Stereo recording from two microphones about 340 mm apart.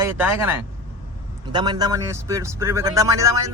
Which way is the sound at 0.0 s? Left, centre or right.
Centre.